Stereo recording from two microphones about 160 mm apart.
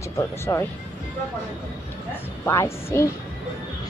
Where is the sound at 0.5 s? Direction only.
20° left (ahead or behind).